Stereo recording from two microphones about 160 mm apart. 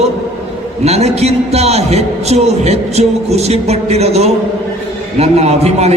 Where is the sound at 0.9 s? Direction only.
40° right (ahead or behind).